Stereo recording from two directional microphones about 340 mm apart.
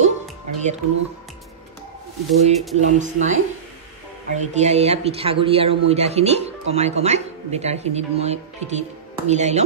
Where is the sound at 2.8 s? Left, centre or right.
Right.